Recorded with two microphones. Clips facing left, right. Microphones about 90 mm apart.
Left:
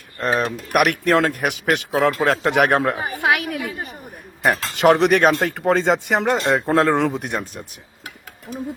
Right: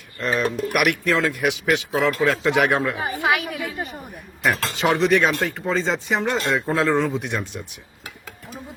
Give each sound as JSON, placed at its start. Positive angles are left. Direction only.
{"t": 0.2, "sound": "speech", "side_deg": 40}
{"t": 0.8, "sound": "a woman's voice", "side_deg": 55}
{"t": 4.7, "sound": "speech", "side_deg": 60}